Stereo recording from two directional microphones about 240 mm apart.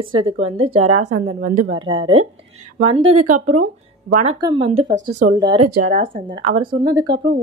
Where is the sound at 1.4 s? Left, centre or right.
Right.